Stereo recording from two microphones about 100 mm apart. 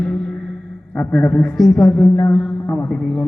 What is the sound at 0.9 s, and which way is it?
A man's voice, 15° left (ahead or behind).